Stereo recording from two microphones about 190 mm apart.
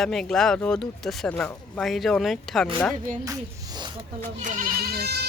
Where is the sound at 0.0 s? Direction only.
5° left (ahead or behind).